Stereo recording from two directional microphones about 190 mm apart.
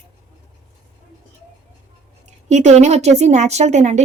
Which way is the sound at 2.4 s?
35° right (ahead or behind).